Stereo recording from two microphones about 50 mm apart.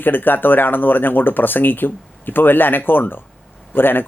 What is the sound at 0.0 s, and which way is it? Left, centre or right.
Speech, left.